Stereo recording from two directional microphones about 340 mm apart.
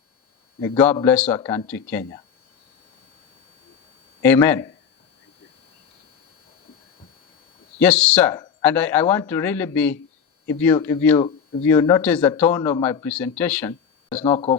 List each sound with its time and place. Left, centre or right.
0.6 s speech: centre
4.2 s speech: centre
7.8 s speech: centre
14.3 s speech: centre